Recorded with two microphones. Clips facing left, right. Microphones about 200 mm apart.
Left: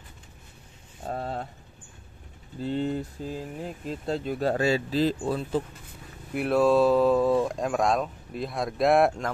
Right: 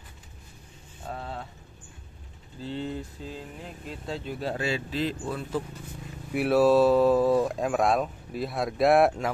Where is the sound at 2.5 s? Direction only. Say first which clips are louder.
Left 5 dB; 45° left (ahead or behind).